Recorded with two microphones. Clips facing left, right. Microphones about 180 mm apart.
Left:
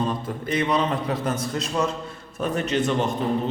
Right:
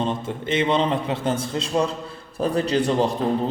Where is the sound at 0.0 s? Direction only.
25° right (ahead or behind).